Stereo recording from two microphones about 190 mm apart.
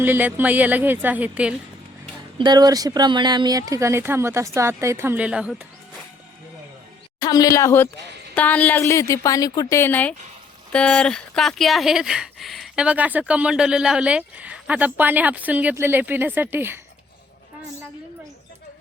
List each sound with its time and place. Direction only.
0.0 s speech: 10° right (ahead or behind)
2.4 s speech: 20° right (ahead or behind); by 5.6 s 5° right (ahead or behind)
7.2 s a woman's voice: 20° left (ahead or behind); by 16.8 s 10° right (ahead or behind)